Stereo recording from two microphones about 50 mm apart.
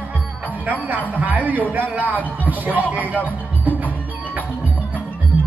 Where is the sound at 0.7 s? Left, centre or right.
Right.